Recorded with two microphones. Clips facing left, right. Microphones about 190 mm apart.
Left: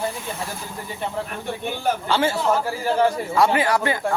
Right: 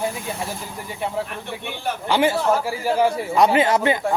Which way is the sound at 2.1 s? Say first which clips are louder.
Right 4 dB; 15° right (ahead or behind).